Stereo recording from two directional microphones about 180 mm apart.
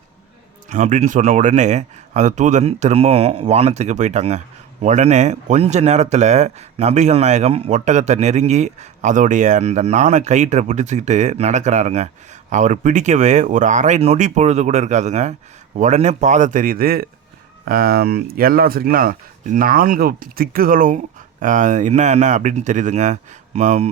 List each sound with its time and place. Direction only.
0.7 s speech: 45° right (ahead or behind)